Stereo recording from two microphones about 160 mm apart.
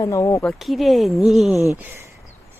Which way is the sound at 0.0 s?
20° left (ahead or behind).